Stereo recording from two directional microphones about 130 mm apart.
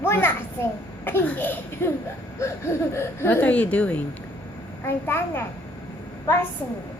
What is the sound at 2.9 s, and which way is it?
A woman's voice, 20° left (ahead or behind).